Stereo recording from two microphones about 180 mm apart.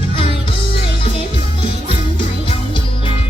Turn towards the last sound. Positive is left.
turn(degrees=30)  # may be behind; listen again after turning